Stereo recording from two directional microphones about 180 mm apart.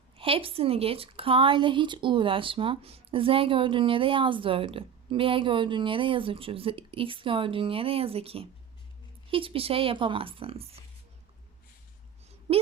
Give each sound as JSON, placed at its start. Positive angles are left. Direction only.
{"t": 0.2, "sound": "a woman's voice", "side_deg": -30}